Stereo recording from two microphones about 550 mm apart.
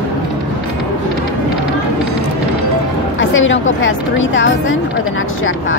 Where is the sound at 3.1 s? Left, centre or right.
Left.